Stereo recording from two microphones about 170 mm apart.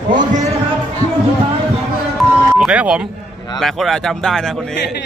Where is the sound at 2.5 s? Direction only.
5° right (ahead or behind).